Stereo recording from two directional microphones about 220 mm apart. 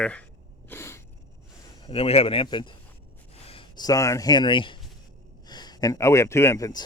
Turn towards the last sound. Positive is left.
turn(degrees=15)  # may be behind; listen again after turning